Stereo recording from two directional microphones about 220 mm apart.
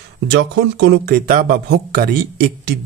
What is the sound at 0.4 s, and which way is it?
Speech, 50° right (ahead or behind).